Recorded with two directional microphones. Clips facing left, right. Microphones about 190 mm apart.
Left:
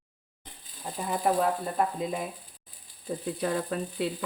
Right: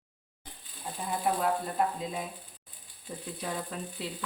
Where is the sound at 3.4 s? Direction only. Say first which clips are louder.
Left 6 dB; 65° left (ahead or behind).